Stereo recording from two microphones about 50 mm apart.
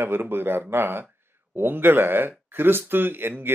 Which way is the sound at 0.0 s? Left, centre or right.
Right.